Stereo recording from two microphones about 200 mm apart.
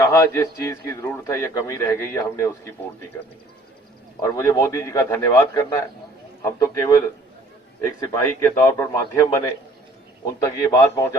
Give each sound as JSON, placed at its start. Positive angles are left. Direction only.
{"t": 0.0, "sound": "a man's voice", "side_deg": 15}
{"t": 4.2, "sound": "a man's voice", "side_deg": 15}
{"t": 10.4, "sound": "a man's voice", "side_deg": 15}